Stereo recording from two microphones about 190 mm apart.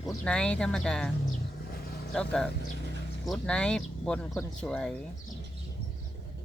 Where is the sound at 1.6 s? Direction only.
50° left (ahead or behind).